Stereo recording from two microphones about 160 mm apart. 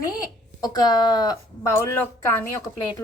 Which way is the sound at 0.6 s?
25° left (ahead or behind).